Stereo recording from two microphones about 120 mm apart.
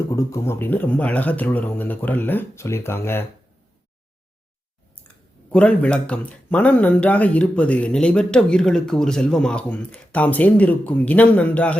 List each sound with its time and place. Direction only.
0.1 s speech: 25° left (ahead or behind)
5.5 s speech: 10° left (ahead or behind)